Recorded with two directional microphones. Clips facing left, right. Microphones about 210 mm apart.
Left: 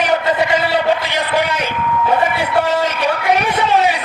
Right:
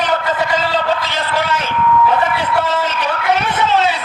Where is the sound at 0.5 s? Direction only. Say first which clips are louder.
Left 2 dB; 10° left (ahead or behind).